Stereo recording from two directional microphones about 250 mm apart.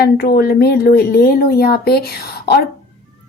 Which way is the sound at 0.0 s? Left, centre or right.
Left.